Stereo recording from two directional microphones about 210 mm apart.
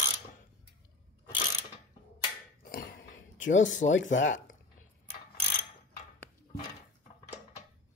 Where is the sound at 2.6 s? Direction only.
45° left (ahead or behind).